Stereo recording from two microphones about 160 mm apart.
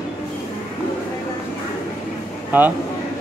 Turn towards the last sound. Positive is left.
turn(degrees=-10)  # may be behind; listen again after turning